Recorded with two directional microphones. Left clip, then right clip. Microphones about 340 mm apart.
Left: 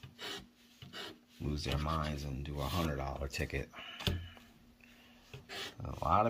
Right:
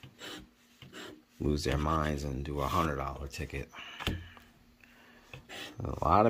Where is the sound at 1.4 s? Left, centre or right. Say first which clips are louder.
Right 7 dB; centre.